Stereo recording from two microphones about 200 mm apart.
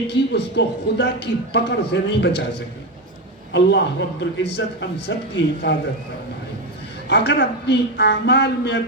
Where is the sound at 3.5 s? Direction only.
60° left (ahead or behind).